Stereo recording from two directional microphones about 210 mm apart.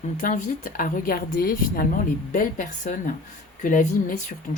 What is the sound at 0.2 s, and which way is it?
A woman's voice, 40° left (ahead or behind).